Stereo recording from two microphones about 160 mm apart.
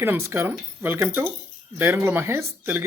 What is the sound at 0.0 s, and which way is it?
Speech, 15° right (ahead or behind).